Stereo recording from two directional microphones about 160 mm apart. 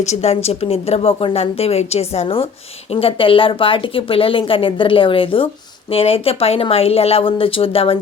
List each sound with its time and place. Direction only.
0.0 s a woman's voice: 45° left (ahead or behind)